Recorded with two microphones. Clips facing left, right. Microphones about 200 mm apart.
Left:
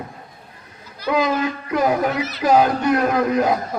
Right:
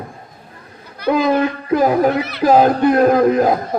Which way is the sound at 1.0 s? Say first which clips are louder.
Right 6 dB; 60° right (ahead or behind).